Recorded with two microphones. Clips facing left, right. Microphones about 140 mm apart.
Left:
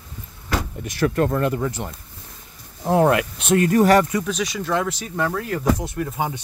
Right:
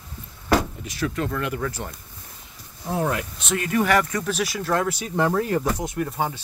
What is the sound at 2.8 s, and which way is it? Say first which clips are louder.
Speech: left 8 dB; 65° left (ahead or behind).